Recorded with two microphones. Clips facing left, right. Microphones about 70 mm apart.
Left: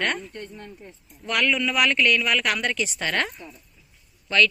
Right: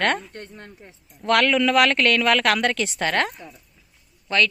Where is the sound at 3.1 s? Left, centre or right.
Right.